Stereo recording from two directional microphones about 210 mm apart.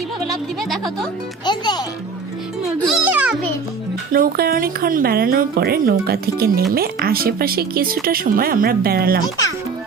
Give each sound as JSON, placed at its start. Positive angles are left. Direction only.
{"t": 1.5, "sound": "music", "side_deg": 20}
{"t": 2.8, "sound": "music", "side_deg": -5}
{"t": 4.1, "sound": "a woman's voice", "side_deg": -45}